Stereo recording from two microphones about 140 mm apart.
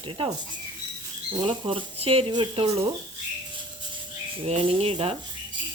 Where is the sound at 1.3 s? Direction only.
35° right (ahead or behind).